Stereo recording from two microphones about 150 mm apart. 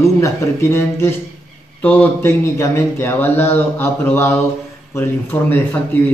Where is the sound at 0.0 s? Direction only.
20° left (ahead or behind).